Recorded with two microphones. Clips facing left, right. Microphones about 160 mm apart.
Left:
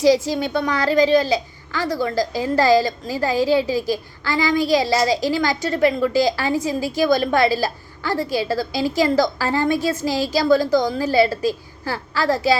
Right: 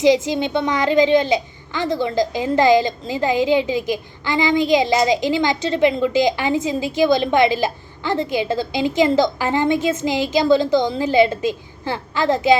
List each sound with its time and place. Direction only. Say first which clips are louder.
0.0 s a woman's voice: right 1 dB; 20° right (ahead or behind)